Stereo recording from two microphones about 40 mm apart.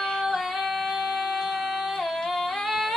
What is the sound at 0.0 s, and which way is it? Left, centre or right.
Music, centre.